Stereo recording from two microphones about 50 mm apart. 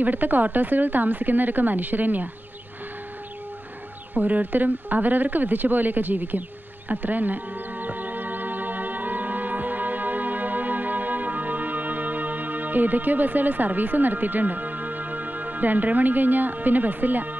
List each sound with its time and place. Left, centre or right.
0.0 s speech: right
4.1 s speech: right
7.8 s music: right